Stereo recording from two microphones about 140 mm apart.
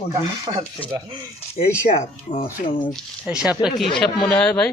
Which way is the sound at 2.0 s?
40° left (ahead or behind).